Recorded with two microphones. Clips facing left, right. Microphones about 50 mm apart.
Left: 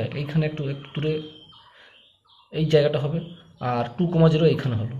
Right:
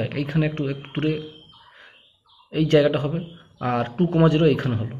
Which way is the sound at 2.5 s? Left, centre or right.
Right.